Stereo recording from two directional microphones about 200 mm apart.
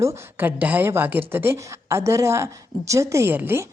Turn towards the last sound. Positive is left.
turn(degrees=-10)  # may be behind; listen again after turning